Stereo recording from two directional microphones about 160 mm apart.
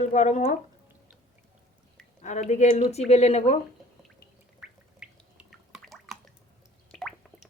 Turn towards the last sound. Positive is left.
turn(degrees=0)  # may be behind; listen again after turning